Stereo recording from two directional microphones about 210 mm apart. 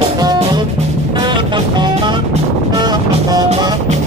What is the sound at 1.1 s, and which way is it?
Music, 20° right (ahead or behind).